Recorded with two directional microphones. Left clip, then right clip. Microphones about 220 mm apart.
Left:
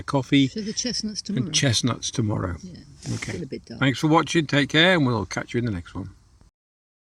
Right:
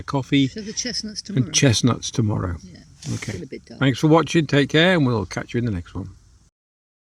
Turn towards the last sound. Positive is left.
turn(degrees=-5)  # may be behind; listen again after turning